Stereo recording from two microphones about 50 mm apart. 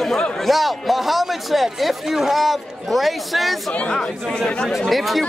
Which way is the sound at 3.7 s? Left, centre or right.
Centre.